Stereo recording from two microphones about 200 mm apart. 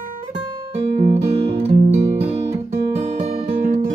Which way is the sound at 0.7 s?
30° right (ahead or behind).